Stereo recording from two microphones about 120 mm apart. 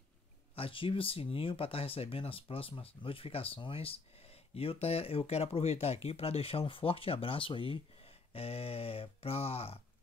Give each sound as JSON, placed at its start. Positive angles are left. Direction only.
{"t": 0.6, "sound": "speech", "side_deg": 50}